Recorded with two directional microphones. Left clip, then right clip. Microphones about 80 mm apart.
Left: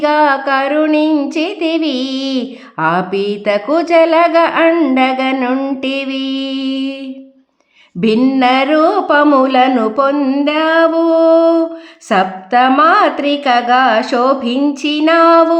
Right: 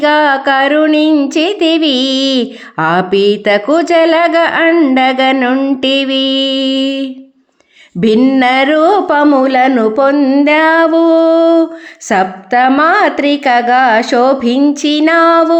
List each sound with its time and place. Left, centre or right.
0.0 s speech: right
4.7 s a woman's voice: centre
4.9 s speech: right
5.4 s a woman's voice: right
5.8 s speech: right
8.0 s a sound: right
9.2 s speech: centre
9.5 s a woman's voice: right
10.2 s speech: centre
10.4 s a woman's voice: right